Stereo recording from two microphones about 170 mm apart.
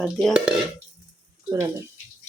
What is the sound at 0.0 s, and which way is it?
Speech, centre (ahead or behind).